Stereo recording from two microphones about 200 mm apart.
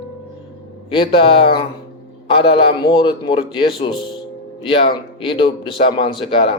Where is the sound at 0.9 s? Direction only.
25° left (ahead or behind).